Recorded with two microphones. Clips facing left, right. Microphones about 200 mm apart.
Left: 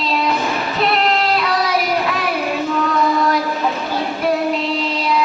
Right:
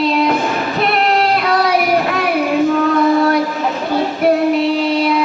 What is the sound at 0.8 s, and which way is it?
Child singing, 55° right (ahead or behind).